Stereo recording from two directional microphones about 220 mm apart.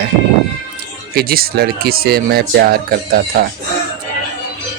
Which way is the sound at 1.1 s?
45° right (ahead or behind).